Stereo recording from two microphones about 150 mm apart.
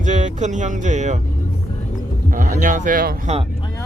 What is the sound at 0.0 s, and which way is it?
Speech, 55° right (ahead or behind).